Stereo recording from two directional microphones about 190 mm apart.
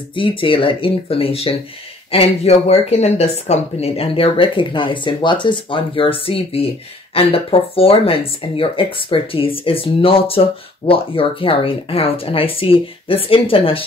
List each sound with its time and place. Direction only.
0.1 s speech: 25° left (ahead or behind)